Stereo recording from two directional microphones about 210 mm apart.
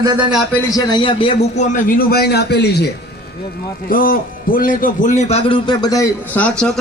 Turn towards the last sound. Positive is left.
turn(degrees=5)  # may be behind; listen again after turning